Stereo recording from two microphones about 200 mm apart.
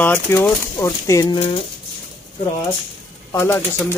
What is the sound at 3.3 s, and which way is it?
Speech, 10° left (ahead or behind).